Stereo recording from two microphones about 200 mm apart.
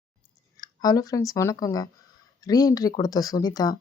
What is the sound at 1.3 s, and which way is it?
Speech, 15° left (ahead or behind).